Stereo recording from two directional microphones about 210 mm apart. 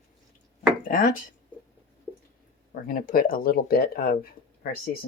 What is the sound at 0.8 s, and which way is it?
Speech, 40° left (ahead or behind).